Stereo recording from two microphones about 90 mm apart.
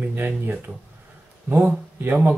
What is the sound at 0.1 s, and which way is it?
Speech, 25° right (ahead or behind).